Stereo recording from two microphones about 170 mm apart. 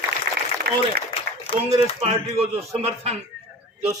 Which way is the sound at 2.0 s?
40° right (ahead or behind).